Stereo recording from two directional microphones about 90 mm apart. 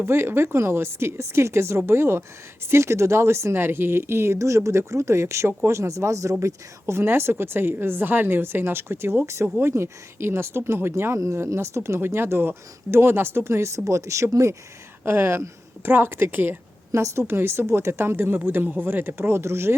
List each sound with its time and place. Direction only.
0.0 s speech: 30° right (ahead or behind)